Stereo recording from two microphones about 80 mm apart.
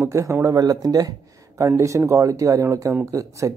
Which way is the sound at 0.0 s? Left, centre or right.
Right.